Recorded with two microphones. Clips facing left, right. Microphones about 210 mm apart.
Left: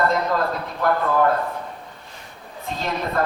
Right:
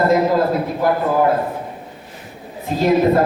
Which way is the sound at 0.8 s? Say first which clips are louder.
Right 2 dB; 15° right (ahead or behind).